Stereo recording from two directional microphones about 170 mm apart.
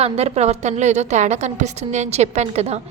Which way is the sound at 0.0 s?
40° right (ahead or behind).